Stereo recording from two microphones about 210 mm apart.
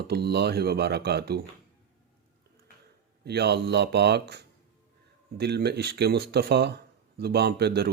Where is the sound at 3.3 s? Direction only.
50° right (ahead or behind).